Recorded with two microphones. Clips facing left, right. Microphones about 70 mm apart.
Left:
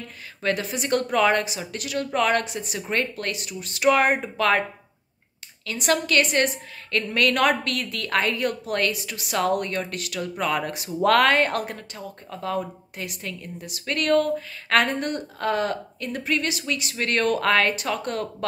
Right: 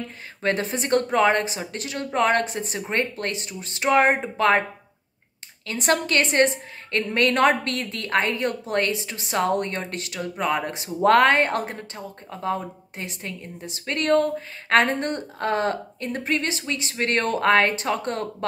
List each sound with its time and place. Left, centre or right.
0.4 s a woman's voice: right
5.7 s a woman's voice: right